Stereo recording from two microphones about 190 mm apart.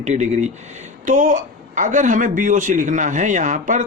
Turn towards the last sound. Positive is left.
turn(degrees=-40)  # may be behind; listen again after turning